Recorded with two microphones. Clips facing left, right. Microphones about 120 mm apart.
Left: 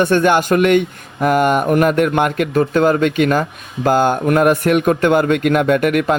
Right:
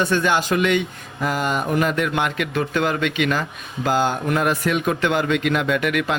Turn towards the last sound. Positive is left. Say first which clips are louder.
# left 7 dB
turn(degrees=45)  # may be behind; listen again after turning